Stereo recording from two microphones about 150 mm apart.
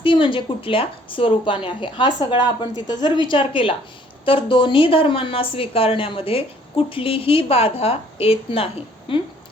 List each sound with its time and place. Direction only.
0.0 s speech: 35° left (ahead or behind)